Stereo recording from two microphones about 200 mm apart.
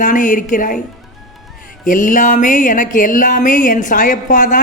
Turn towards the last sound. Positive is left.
turn(degrees=40)  # may be behind; listen again after turning